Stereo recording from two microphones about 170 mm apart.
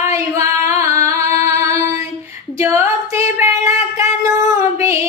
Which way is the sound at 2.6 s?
15° right (ahead or behind).